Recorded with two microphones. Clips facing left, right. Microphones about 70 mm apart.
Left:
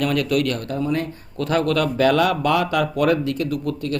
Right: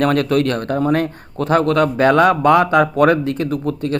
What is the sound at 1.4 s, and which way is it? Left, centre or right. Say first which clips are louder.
A man's voice: right 5 dB; right.